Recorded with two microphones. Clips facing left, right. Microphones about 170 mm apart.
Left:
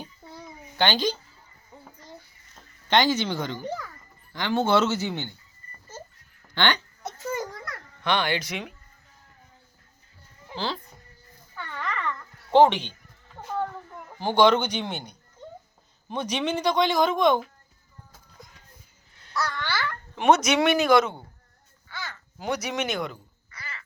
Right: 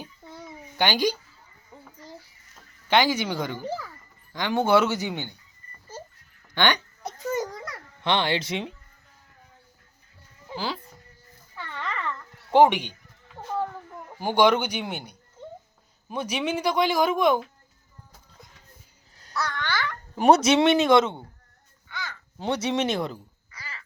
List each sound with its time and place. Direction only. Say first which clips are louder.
0.0 s a sound: even; centre (ahead or behind)
0.8 s speech: right 1 dB; 15° right (ahead or behind)
2.9 s speech: even; 10° right (ahead or behind)
6.5 s speech: right 1 dB; 15° right (ahead or behind)
7.3 s a sound: right 3 dB; 15° right (ahead or behind)
8.0 s speech: right 1 dB; 25° right (ahead or behind)
10.5 s speech: even; 10° right (ahead or behind)
11.8 s babbling: left 1 dB; 5° right (ahead or behind)
14.2 s speech: left 1 dB; 10° right (ahead or behind)
19.3 s babbling: even; centre (ahead or behind)
20.1 s speech: right 2 dB; 35° right (ahead or behind)
22.4 s speech: right 3 dB; 30° right (ahead or behind)